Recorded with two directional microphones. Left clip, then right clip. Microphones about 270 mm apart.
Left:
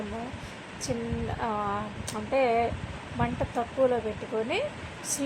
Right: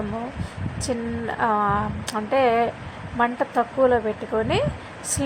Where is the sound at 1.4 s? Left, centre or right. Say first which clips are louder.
Right 10 dB; centre.